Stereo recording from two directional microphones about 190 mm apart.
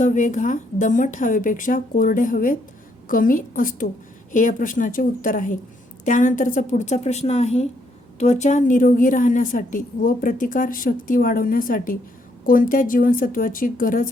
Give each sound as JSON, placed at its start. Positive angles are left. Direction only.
{"t": 0.0, "sound": "a woman's voice", "side_deg": 40}